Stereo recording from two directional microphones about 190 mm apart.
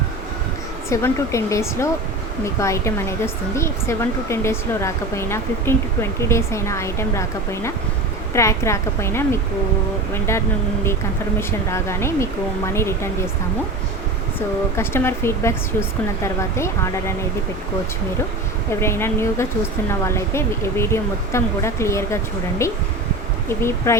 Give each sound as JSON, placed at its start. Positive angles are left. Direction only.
{"t": 0.9, "sound": "speech", "side_deg": 15}
{"t": 11.3, "sound": "speech", "side_deg": 15}
{"t": 14.8, "sound": "speech", "side_deg": 15}
{"t": 18.7, "sound": "speech", "side_deg": 15}